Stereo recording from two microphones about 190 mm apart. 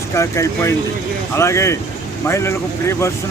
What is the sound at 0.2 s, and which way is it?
Speech, 15° left (ahead or behind).